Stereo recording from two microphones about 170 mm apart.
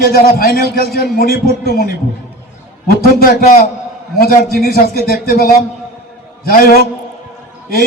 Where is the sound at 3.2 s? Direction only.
60° left (ahead or behind).